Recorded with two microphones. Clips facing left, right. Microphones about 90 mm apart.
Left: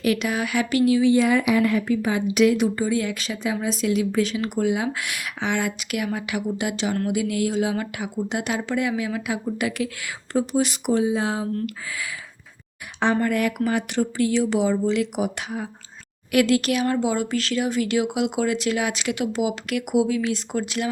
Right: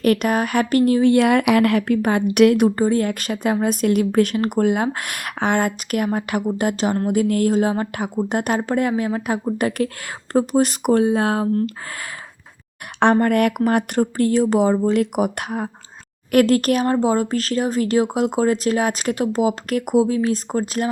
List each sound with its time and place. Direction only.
0.0 s speech: 50° right (ahead or behind)
13.0 s speech: 55° right (ahead or behind)